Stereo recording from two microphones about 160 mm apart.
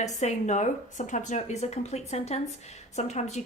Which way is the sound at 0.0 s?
45° left (ahead or behind).